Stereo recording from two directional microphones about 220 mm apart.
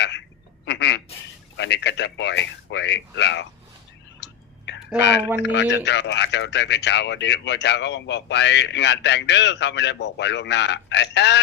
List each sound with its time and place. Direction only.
0.6 s quack: 50° left (ahead or behind)
1.5 s speech: 50° left (ahead or behind)
4.2 s whispering: 55° left (ahead or behind)
4.9 s speech: 50° left (ahead or behind)